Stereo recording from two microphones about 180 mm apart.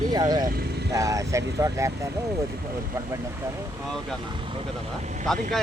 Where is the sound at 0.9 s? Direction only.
20° right (ahead or behind).